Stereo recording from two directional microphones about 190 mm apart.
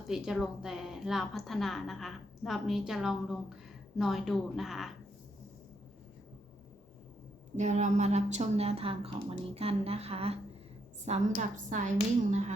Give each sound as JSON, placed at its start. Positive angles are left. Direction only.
{"t": 0.1, "sound": "a woman's voice", "side_deg": 0}
{"t": 7.5, "sound": "a woman's voice", "side_deg": -40}
{"t": 11.3, "sound": "a woman's voice", "side_deg": -40}